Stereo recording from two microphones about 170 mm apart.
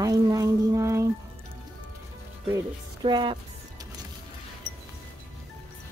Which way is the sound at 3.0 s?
25° right (ahead or behind).